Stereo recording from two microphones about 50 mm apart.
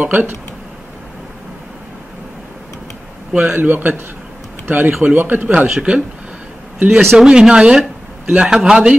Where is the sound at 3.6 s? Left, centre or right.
Right.